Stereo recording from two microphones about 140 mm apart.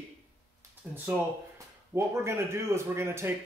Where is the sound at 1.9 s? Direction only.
20° right (ahead or behind).